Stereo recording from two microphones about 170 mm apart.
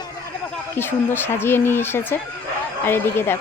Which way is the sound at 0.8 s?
10° left (ahead or behind).